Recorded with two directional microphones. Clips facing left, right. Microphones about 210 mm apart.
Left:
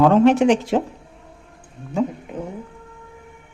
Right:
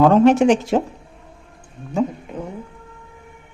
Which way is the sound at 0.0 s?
40° right (ahead or behind).